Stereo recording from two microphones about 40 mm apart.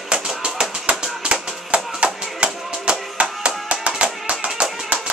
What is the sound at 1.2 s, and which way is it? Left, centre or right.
Tap, right.